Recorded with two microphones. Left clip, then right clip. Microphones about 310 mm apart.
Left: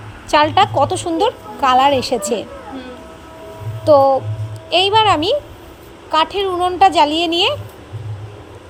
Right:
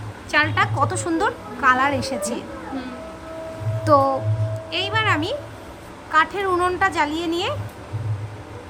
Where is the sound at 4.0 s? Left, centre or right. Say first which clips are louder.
Left 6 dB; centre.